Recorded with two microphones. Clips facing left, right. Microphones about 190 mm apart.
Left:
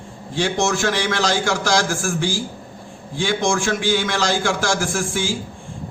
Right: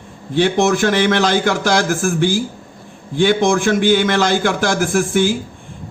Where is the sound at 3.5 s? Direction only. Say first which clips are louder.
Right 6 dB; 55° right (ahead or behind).